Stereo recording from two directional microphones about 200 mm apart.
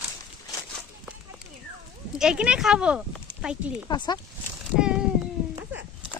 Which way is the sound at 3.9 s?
20° left (ahead or behind).